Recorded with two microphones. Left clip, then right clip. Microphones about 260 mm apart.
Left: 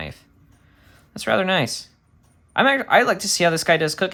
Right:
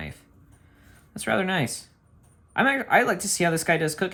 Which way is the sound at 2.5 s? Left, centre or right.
Centre.